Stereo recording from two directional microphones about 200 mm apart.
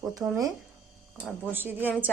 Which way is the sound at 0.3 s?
15° right (ahead or behind).